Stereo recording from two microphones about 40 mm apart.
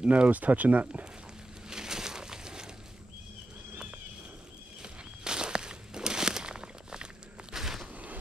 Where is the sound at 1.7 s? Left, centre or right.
Centre.